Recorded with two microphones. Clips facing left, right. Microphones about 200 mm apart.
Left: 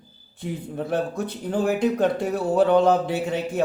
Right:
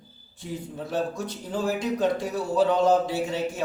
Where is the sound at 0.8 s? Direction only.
60° left (ahead or behind).